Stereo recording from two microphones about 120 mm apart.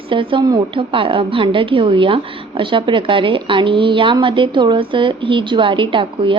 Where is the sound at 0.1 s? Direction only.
45° right (ahead or behind).